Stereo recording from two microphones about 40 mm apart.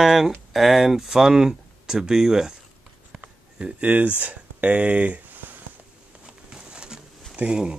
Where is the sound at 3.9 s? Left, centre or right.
Right.